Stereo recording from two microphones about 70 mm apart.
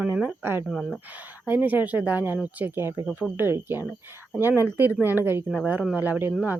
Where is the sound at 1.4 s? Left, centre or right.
Right.